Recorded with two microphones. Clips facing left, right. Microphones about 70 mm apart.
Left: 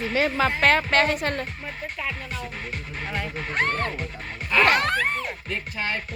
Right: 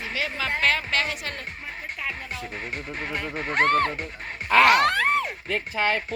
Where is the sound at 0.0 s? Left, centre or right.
Left.